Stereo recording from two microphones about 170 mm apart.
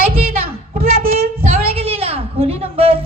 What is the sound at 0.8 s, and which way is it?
Child singing, 35° right (ahead or behind).